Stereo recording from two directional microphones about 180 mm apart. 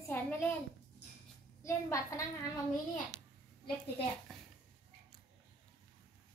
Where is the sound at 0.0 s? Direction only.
15° left (ahead or behind).